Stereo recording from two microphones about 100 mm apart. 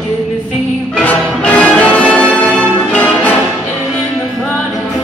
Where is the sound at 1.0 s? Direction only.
15° left (ahead or behind).